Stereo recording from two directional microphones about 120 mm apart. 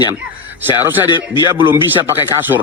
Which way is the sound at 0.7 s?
15° right (ahead or behind).